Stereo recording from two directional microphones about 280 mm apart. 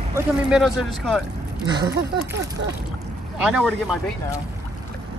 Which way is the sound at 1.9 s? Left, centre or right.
Right.